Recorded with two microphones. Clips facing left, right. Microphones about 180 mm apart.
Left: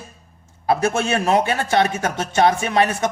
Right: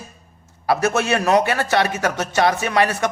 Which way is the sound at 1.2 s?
25° left (ahead or behind).